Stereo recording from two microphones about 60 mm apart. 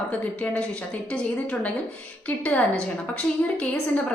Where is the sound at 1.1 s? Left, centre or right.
Left.